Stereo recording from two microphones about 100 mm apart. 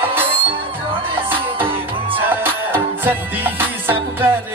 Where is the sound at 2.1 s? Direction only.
20° right (ahead or behind).